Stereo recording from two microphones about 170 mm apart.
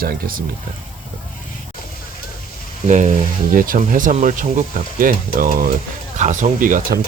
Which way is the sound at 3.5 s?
55° right (ahead or behind).